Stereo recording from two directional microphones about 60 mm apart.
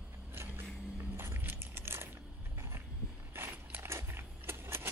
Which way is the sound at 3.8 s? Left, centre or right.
Right.